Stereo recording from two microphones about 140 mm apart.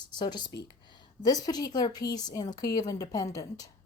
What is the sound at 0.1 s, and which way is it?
A woman's voice, 30° left (ahead or behind).